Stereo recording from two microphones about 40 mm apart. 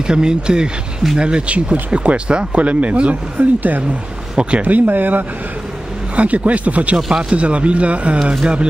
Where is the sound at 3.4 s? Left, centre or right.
Right.